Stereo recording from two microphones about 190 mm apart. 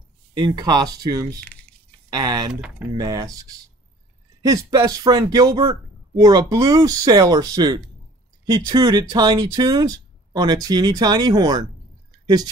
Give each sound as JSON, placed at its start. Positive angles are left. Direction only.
{"t": 0.4, "sound": "speech", "side_deg": -20}
{"t": 1.4, "sound": "a sound", "side_deg": 5}
{"t": 2.0, "sound": "speech", "side_deg": -20}